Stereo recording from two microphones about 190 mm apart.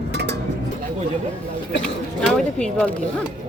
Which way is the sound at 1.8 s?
5° left (ahead or behind).